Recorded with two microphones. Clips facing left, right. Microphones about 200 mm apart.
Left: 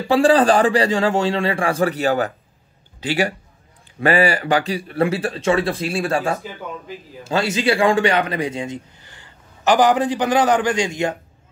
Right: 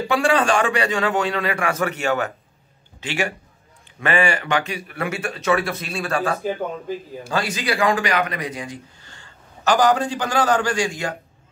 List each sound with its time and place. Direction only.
0.1 s a man's voice: 35° left (ahead or behind)